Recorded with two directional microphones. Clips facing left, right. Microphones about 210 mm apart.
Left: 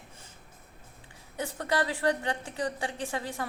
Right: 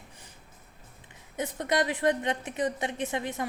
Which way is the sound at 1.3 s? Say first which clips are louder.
Right 2 dB; 20° right (ahead or behind).